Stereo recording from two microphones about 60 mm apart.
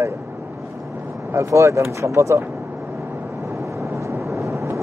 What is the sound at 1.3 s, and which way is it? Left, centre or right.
Speech, right.